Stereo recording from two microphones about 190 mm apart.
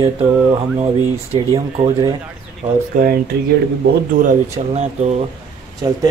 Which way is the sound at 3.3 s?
60° right (ahead or behind).